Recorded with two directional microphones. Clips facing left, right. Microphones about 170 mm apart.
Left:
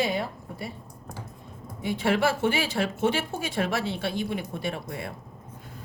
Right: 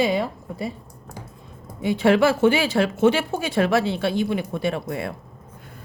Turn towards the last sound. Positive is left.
turn(degrees=-90)